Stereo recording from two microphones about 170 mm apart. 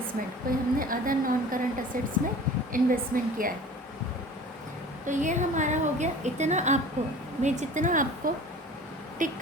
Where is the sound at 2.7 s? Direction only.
55° right (ahead or behind).